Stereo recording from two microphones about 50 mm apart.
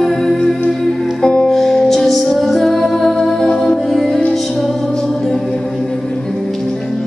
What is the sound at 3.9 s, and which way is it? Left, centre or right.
Music, centre.